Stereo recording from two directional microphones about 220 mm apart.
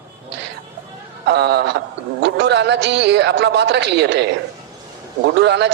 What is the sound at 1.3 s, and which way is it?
A man's voice, 50° right (ahead or behind).